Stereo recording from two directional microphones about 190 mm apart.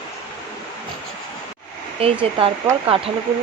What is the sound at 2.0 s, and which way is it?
Speech, 30° right (ahead or behind).